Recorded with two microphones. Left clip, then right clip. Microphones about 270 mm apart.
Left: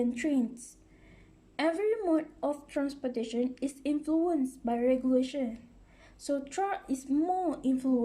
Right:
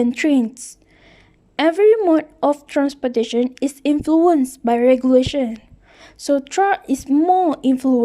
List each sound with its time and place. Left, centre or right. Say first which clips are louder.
0.0 s speech: right 13 dB; right